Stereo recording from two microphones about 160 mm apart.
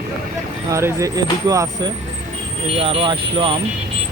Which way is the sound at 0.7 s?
20° right (ahead or behind).